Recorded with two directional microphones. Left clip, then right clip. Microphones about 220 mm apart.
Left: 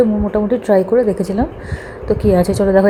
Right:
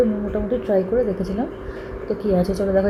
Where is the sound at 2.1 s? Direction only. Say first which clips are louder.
Left 7 dB; 35° left (ahead or behind).